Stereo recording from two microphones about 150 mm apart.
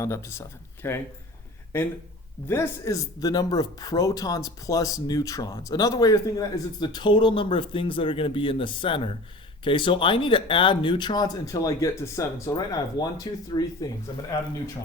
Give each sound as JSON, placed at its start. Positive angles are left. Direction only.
{"t": 0.0, "sound": "speech", "side_deg": 20}